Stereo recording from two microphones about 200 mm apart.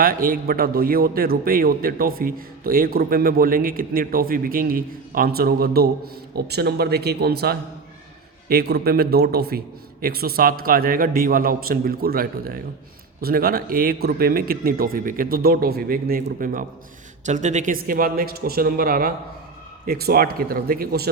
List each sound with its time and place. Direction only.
0.0 s a man's voice: 45° right (ahead or behind)